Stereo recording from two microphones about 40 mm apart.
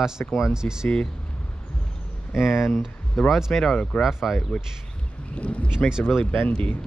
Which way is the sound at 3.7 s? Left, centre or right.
Left.